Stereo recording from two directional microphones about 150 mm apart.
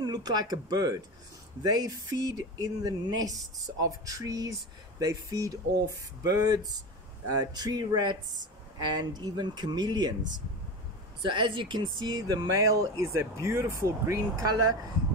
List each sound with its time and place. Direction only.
0.0 s speech: 25° right (ahead or behind)